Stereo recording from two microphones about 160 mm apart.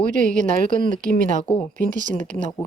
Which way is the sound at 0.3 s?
55° right (ahead or behind).